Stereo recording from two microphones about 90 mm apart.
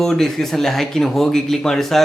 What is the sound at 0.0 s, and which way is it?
Speech, 5° left (ahead or behind).